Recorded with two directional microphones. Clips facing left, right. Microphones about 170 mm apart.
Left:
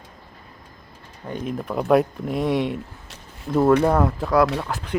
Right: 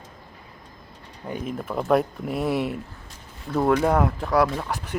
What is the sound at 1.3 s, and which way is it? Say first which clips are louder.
Speech: left 2 dB; 5° right (ahead or behind).